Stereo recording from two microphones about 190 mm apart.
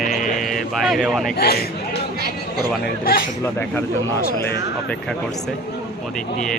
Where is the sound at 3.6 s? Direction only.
10° left (ahead or behind).